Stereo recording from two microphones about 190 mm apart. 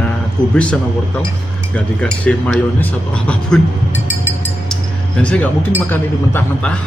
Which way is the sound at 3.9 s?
75° right (ahead or behind).